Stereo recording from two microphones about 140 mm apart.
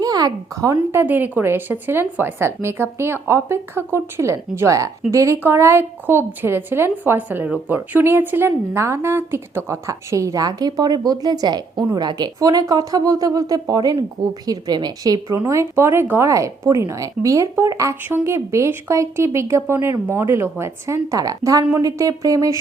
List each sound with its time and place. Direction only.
0.0 s speech: 25° right (ahead or behind)